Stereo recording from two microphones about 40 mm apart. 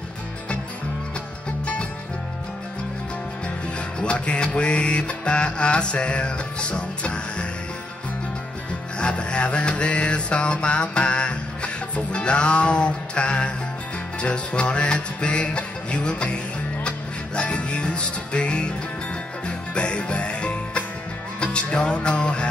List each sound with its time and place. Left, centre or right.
4.0 s mantra: left
9.0 s mantra: left
17.4 s music: left